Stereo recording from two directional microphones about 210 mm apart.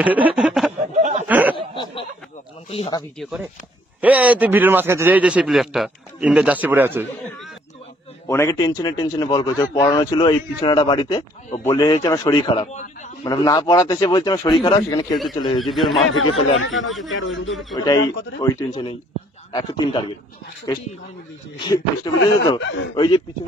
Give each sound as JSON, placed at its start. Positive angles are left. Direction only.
{"t": 0.0, "sound": "speech", "side_deg": -5}
{"t": 0.9, "sound": "speech", "side_deg": -35}
{"t": 1.2, "sound": "snicker", "side_deg": -10}
{"t": 2.7, "sound": "a man's voice", "side_deg": 25}
{"t": 3.2, "sound": "a man's voice", "side_deg": 0}
{"t": 8.3, "sound": "a man's voice", "side_deg": 15}
{"t": 13.2, "sound": "a man's voice", "side_deg": 15}
{"t": 15.6, "sound": "speech", "side_deg": 0}
{"t": 16.1, "sound": "speech", "side_deg": 75}
{"t": 16.8, "sound": "speech", "side_deg": 0}
{"t": 17.7, "sound": "a man's voice", "side_deg": 20}
{"t": 21.5, "sound": "a man's voice", "side_deg": 20}
{"t": 22.4, "sound": "a man's voice", "side_deg": 60}
{"t": 22.9, "sound": "a man's voice", "side_deg": 20}